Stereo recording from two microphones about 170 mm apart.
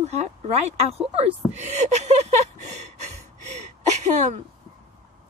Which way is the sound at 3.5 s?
45° right (ahead or behind).